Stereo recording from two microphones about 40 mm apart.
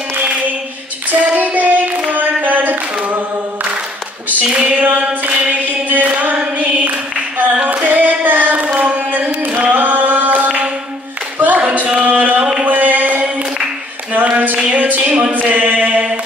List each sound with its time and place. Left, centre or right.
1.3 s singing: right
4.3 s female singing: right
4.8 s singing: right
5.9 s chant: right
7.6 s hands: right
9.6 s singing: right
11.3 s clapping: right
11.6 s a sound: right